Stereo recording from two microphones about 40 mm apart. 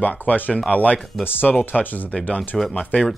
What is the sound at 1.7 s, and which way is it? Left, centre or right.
Speech, left.